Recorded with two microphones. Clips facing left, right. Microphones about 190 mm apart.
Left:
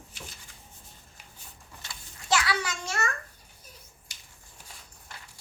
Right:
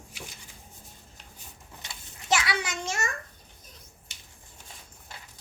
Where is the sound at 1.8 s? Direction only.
20° right (ahead or behind).